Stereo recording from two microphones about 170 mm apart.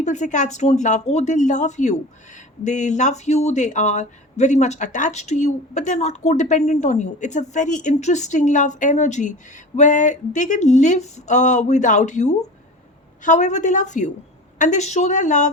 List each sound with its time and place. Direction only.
0.0 s a woman's voice: 45° left (ahead or behind)